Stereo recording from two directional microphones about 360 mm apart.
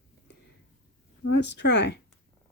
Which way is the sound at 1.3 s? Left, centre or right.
Left.